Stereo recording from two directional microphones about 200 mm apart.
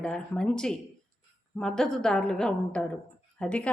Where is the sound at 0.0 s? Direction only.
5° left (ahead or behind).